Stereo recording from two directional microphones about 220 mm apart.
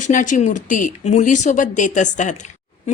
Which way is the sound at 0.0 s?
35° left (ahead or behind).